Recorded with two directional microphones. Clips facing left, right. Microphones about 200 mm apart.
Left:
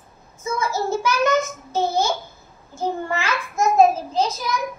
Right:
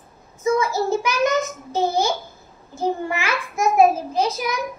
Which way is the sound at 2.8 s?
15° right (ahead or behind).